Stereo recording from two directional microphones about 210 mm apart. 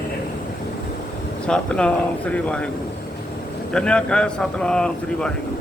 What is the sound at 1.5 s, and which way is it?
Speech, 5° left (ahead or behind).